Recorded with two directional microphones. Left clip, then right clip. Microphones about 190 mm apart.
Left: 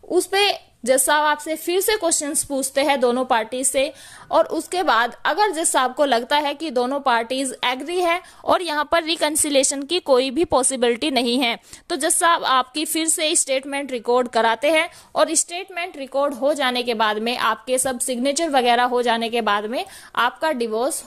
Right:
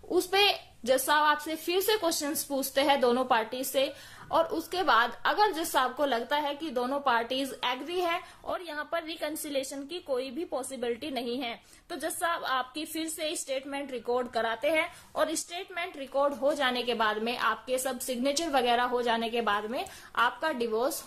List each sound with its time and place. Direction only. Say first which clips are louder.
0.1 s a woman's voice: left 6 dB; 35° left (ahead or behind)